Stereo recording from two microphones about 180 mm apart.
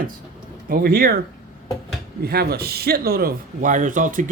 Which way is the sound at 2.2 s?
60° right (ahead or behind).